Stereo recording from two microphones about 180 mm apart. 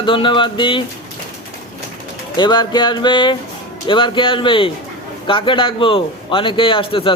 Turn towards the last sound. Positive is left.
turn(degrees=30)  # may be behind; listen again after turning